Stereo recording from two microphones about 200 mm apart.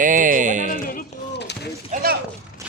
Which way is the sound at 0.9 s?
50° left (ahead or behind).